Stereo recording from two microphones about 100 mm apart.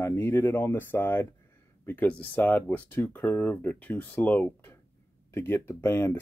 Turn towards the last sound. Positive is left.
turn(degrees=25)  # may be behind; listen again after turning